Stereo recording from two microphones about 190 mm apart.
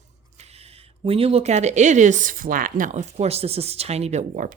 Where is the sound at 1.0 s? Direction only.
30° right (ahead or behind).